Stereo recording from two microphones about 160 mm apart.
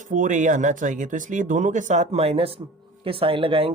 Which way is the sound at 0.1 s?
50° right (ahead or behind).